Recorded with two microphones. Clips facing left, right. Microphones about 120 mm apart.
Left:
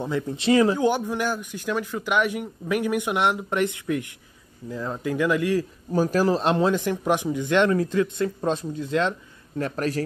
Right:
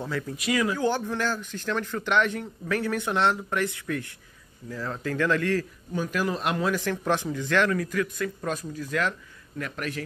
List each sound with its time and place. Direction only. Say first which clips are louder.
0.0 s speech: left 5 dB; 20° left (ahead or behind)
0.8 s speech: left 3 dB; 15° left (ahead or behind)
5.9 s speech: left 7 dB; 35° left (ahead or behind)
9.6 s speech: left 7 dB; 35° left (ahead or behind)